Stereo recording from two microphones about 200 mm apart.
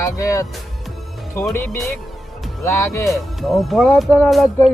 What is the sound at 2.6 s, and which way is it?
Speech, 15° left (ahead or behind).